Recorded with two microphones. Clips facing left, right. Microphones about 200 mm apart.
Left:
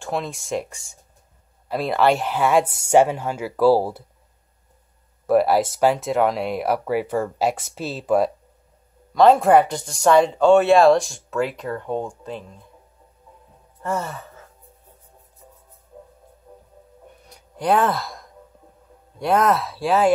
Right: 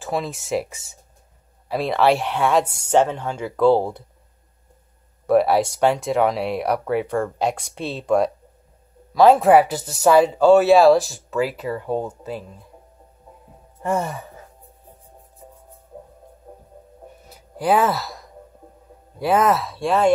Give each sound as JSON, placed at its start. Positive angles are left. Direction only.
{"t": 0.0, "sound": "speech", "side_deg": 0}
{"t": 5.2, "sound": "speech", "side_deg": 0}
{"t": 13.8, "sound": "sigh", "side_deg": -15}
{"t": 15.4, "sound": "music", "side_deg": -45}
{"t": 16.5, "sound": "heart murmur", "side_deg": -55}
{"t": 17.2, "sound": "sigh", "side_deg": -5}
{"t": 19.1, "sound": "speech", "side_deg": -5}